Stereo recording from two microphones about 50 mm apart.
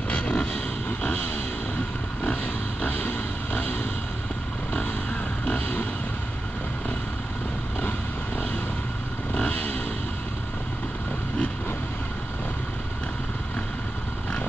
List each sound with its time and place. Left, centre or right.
0.1 s vehicle: left
2.8 s music: left
5.4 s music: left
9.3 s vehicle: left